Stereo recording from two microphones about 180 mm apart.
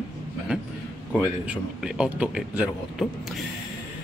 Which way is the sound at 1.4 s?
5° right (ahead or behind).